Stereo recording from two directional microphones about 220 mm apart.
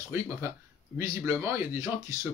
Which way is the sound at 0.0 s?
15° right (ahead or behind).